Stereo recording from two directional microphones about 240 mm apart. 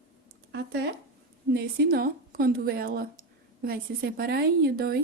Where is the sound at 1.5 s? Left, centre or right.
Right.